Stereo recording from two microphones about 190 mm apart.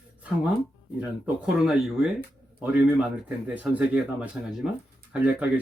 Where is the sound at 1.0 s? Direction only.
5° right (ahead or behind).